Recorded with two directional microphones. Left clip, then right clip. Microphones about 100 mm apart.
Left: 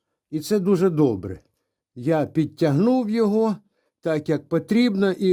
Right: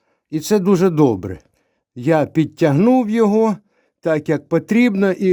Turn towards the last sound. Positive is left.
turn(degrees=-5)  # may be behind; listen again after turning